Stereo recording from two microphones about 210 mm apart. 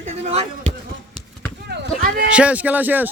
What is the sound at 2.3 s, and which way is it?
Speech, 5° right (ahead or behind).